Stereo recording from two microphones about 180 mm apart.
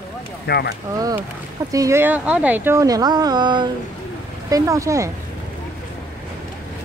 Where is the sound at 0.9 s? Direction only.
20° right (ahead or behind).